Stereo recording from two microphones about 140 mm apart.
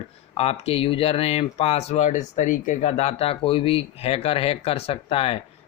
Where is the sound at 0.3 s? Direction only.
45° left (ahead or behind).